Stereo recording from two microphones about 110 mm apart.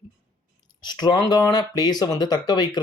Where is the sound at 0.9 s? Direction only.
40° left (ahead or behind).